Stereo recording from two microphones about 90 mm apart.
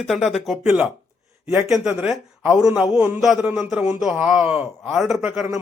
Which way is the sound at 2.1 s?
10° right (ahead or behind).